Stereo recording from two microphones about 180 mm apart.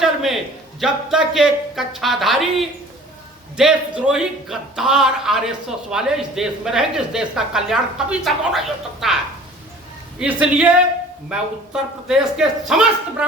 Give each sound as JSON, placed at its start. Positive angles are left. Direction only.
{"t": 0.0, "sound": "a sound", "side_deg": 0}
{"t": 0.8, "sound": "a man's voice", "side_deg": 0}
{"t": 10.2, "sound": "a man's voice", "side_deg": -5}